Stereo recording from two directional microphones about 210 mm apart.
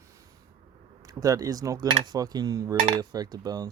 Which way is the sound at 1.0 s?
15° right (ahead or behind).